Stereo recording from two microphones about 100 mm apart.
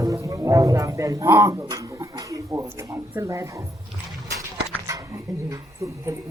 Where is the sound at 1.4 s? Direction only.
30° right (ahead or behind).